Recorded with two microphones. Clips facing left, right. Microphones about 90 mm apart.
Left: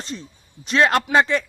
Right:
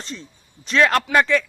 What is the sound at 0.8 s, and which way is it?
Speech, 20° left (ahead or behind).